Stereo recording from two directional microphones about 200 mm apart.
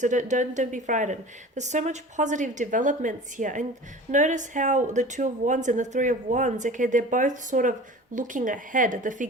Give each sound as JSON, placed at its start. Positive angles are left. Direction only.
{"t": 0.0, "sound": "speech", "side_deg": -40}